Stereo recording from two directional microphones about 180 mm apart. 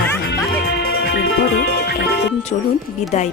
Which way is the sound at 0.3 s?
65° left (ahead or behind).